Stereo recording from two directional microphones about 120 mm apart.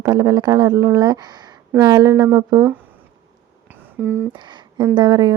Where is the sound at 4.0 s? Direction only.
15° right (ahead or behind).